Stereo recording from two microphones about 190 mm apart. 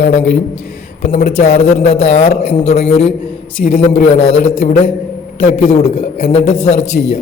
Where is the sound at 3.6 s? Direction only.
45° left (ahead or behind).